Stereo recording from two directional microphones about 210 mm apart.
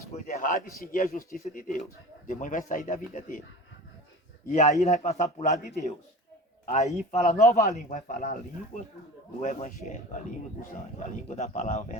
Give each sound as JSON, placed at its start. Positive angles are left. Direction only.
{"t": 0.3, "sound": "speech", "side_deg": 40}
{"t": 4.4, "sound": "speech", "side_deg": 35}
{"t": 11.3, "sound": "speech", "side_deg": 35}